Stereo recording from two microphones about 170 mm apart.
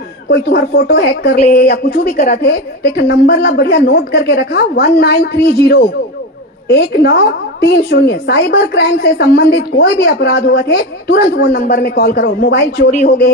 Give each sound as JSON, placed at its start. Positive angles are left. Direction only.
{"t": 0.3, "sound": "a woman's voice", "side_deg": 70}